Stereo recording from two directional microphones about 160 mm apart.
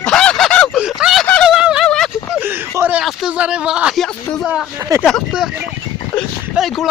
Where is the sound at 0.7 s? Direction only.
5° right (ahead or behind).